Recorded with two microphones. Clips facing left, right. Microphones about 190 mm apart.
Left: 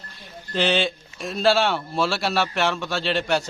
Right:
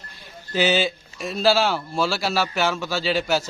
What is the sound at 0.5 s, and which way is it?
A man's voice, 5° right (ahead or behind).